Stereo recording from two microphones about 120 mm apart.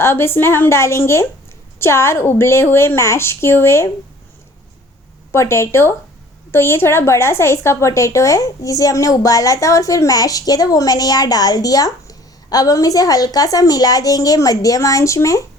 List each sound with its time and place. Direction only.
0.0 s a woman's voice: 20° left (ahead or behind)
5.3 s a woman's voice: 25° left (ahead or behind)